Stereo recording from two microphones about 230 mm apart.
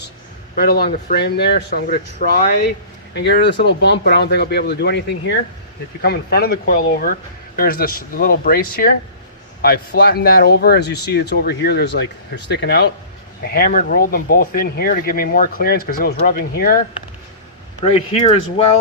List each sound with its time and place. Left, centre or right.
0.6 s speech: left
17.8 s speech: left